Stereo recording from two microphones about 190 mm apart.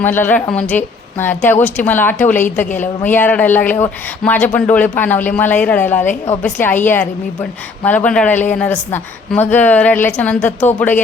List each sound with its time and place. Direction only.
0.0 s speech: 10° left (ahead or behind)